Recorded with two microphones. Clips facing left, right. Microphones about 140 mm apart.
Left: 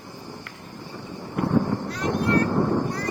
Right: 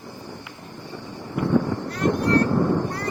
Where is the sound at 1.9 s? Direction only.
50° right (ahead or behind).